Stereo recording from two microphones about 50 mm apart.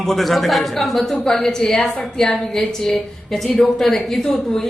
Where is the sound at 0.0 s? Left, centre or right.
Centre.